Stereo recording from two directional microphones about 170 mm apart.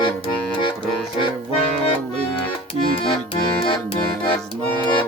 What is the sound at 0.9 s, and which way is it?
Music, 5° left (ahead or behind).